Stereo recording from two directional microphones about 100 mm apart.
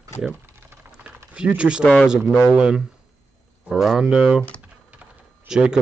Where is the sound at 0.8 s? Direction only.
15° right (ahead or behind).